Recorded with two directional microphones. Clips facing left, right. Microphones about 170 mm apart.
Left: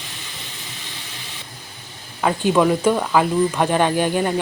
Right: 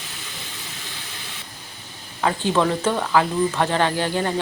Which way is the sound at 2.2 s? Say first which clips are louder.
Left 3 dB; 15° left (ahead or behind).